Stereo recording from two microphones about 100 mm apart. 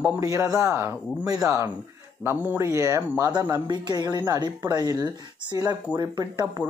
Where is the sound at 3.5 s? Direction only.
45° right (ahead or behind).